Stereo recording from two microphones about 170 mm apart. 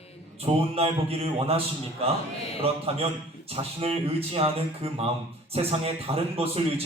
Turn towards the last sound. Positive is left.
turn(degrees=-35)  # may be behind; listen again after turning